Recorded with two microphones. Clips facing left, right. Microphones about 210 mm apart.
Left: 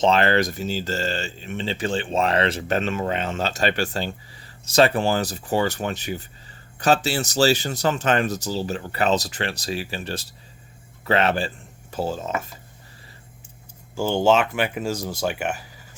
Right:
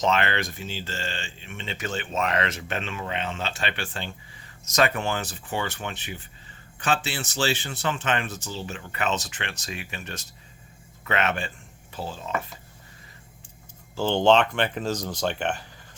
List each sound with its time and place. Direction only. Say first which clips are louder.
0.0 s speech: left 6 dB; 35° left (ahead or behind)
13.9 s speech: left 1 dB; 10° left (ahead or behind)